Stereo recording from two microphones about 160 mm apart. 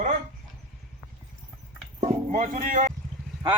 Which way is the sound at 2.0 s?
55° right (ahead or behind).